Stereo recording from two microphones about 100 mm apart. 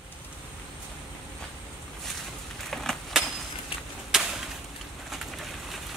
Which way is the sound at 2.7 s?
5° left (ahead or behind).